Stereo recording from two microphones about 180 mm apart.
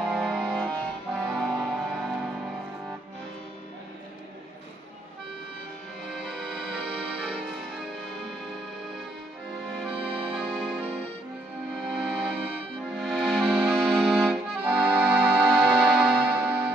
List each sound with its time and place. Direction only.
0.0 s music: centre (ahead or behind)
6.1 s music: 5° right (ahead or behind)
9.9 s music: 30° right (ahead or behind)
10.3 s music: 5° right (ahead or behind)
11.9 s music: 5° right (ahead or behind)
12.9 s accordion: centre (ahead or behind)